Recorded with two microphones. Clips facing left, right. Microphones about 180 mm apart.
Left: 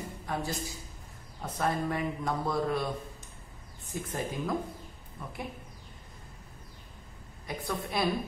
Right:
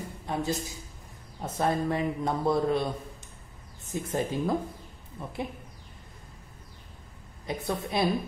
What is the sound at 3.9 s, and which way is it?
A man's voice, 25° right (ahead or behind).